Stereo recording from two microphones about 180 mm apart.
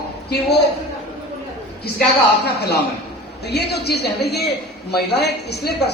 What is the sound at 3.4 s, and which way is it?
A woman's voice, 65° left (ahead or behind).